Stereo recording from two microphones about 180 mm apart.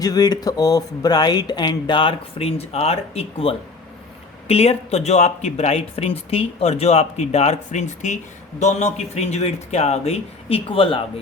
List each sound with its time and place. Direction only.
0.0 s speech: 20° left (ahead or behind)